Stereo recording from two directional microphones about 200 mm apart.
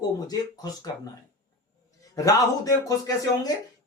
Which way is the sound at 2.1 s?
15° left (ahead or behind).